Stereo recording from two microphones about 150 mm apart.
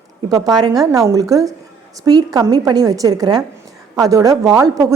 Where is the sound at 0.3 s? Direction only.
25° right (ahead or behind).